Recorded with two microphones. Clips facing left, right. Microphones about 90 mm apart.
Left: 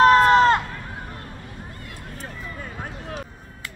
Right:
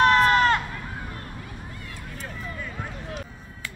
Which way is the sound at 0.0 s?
30° left (ahead or behind).